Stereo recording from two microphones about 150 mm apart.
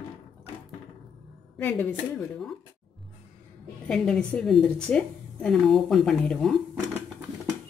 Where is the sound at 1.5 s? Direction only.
10° left (ahead or behind).